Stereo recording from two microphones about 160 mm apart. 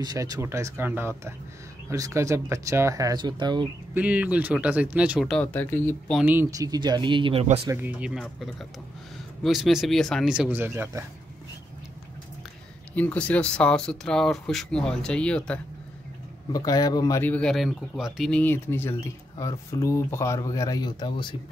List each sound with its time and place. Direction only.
0.0 s speech: 25° right (ahead or behind)
3.9 s speech: 10° right (ahead or behind)
5.3 s speech: 10° left (ahead or behind)
6.2 s speech: 15° right (ahead or behind)
7.6 s speech: 15° right (ahead or behind)
12.9 s speech: 10° left (ahead or behind)
16.5 s speech: 20° left (ahead or behind)
17.2 s speech: 10° left (ahead or behind)
18.4 s speech: 15° left (ahead or behind)